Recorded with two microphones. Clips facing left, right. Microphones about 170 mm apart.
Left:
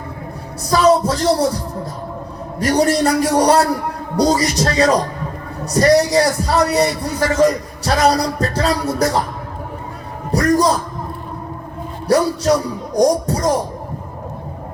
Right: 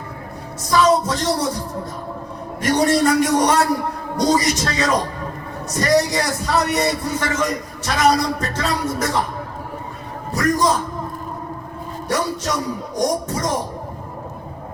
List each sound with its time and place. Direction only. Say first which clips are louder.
0.7 s a man's voice: left 3 dB; 35° left (ahead or behind)
2.6 s a man's voice: left 2 dB; 35° left (ahead or behind)
10.3 s a man's voice: left 4 dB; 35° left (ahead or behind)
12.0 s a man's voice: left 8 dB; 35° left (ahead or behind)